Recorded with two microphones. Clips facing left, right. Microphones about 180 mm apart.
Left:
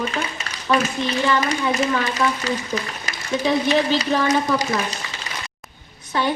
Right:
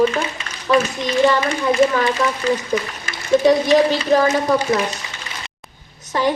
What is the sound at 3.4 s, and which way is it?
Speech, 40° right (ahead or behind).